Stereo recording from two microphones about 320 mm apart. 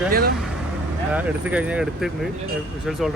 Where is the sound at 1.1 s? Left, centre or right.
Centre.